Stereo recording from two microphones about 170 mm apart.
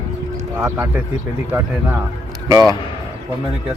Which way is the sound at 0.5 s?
15° right (ahead or behind).